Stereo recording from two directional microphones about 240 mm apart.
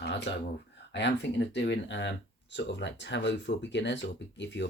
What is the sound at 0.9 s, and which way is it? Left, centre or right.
Speech, left.